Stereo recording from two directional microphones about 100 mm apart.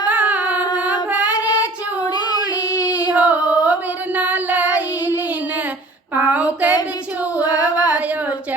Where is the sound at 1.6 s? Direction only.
40° left (ahead or behind).